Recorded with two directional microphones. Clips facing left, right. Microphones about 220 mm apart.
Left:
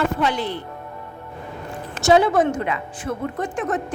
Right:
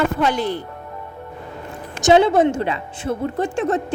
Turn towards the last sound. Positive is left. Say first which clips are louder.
# right 4 dB
turn(degrees=-25)  # may be behind; listen again after turning